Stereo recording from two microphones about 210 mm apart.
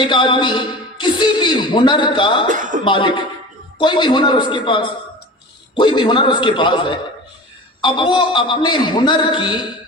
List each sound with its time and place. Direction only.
0.0 s speech: 20° left (ahead or behind)
2.5 s speech: 40° right (ahead or behind)
2.8 s speech: 20° left (ahead or behind)